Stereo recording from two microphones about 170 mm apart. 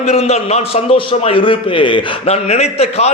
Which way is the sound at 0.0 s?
40° left (ahead or behind).